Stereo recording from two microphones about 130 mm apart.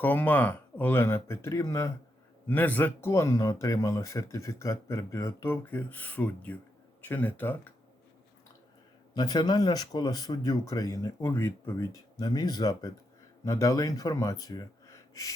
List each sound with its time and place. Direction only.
0.0 s speech: 15° left (ahead or behind)
9.1 s speech: 30° left (ahead or behind)